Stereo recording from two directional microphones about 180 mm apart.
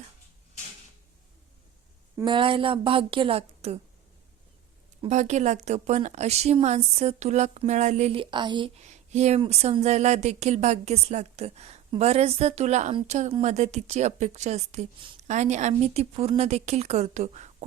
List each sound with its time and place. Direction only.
2.2 s a woman's voice: 30° right (ahead or behind)
5.0 s a woman's voice: 40° right (ahead or behind)